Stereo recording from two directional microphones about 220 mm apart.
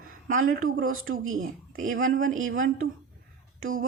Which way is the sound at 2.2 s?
65° right (ahead or behind).